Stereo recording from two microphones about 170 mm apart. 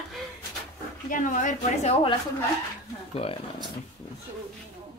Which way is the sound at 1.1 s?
50° left (ahead or behind).